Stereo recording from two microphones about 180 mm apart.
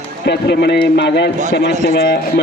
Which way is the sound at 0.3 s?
65° left (ahead or behind).